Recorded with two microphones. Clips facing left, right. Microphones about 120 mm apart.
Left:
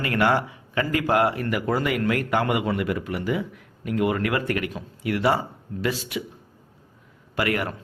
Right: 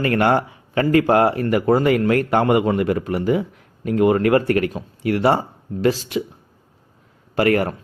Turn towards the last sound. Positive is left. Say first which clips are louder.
# right 7 dB
turn(degrees=-35)  # may be behind; listen again after turning